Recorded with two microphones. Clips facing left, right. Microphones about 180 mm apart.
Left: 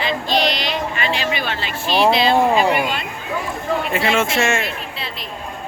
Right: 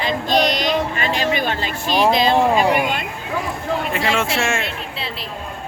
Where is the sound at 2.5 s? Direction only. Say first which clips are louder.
Even; 10° right (ahead or behind).